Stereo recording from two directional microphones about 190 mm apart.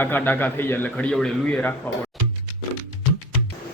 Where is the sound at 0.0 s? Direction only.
10° left (ahead or behind).